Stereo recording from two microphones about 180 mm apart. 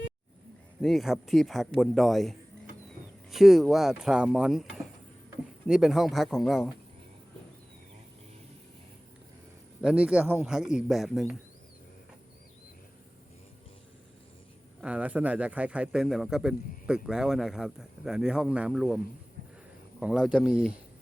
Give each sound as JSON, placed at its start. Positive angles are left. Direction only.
{"t": 0.8, "sound": "speech", "side_deg": 0}
{"t": 9.8, "sound": "speech", "side_deg": -5}
{"t": 14.8, "sound": "speech", "side_deg": -5}